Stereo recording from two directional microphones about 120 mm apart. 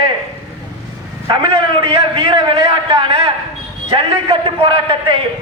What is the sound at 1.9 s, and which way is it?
A man's voice, 45° right (ahead or behind).